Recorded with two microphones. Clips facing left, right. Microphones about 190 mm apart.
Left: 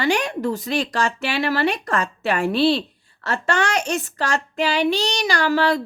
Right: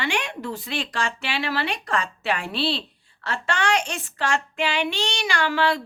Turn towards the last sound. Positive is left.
turn(degrees=40)  # may be behind; listen again after turning